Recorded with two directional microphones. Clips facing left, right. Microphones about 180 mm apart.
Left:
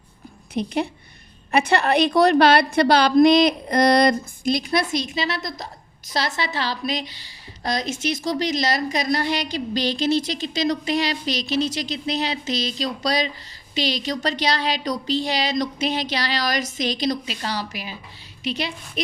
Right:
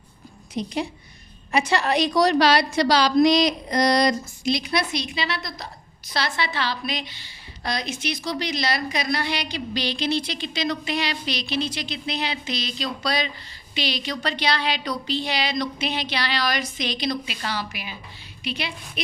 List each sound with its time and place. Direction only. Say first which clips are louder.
0.5 s a woman's voice: left 3 dB; 60° left (ahead or behind); by 18.7 s 40° left (ahead or behind)